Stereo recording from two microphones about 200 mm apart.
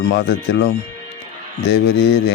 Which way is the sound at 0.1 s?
55° left (ahead or behind).